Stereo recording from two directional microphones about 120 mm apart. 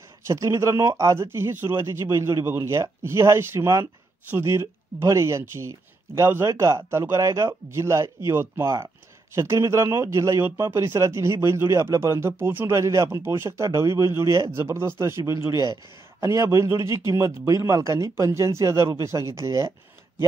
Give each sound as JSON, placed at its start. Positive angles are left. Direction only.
{"t": 0.3, "sound": "speech", "side_deg": -25}